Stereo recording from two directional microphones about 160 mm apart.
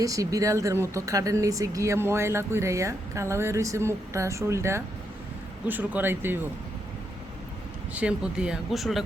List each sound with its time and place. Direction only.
0.0 s speech: 20° right (ahead or behind)
7.9 s speech: 5° right (ahead or behind)